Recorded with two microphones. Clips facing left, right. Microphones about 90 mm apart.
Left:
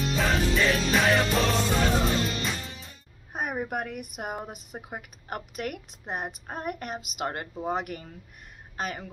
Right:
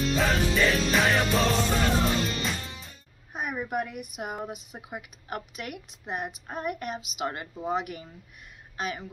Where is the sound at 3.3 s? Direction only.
40° left (ahead or behind).